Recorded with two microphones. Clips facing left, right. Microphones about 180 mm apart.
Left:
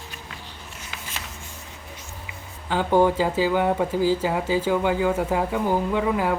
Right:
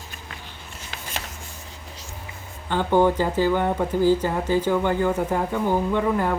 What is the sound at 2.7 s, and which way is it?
Speech, 5° left (ahead or behind).